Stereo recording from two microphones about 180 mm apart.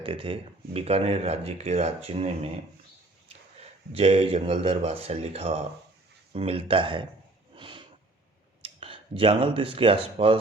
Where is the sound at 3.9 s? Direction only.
35° right (ahead or behind).